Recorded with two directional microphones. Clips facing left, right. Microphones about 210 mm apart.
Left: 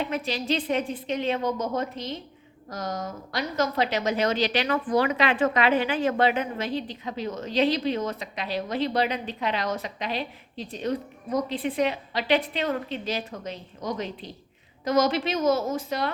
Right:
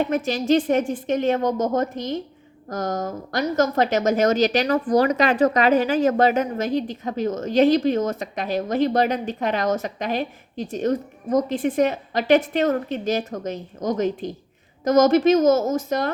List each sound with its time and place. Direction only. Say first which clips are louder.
0.0 s a woman's voice: right 6 dB; 45° right (ahead or behind)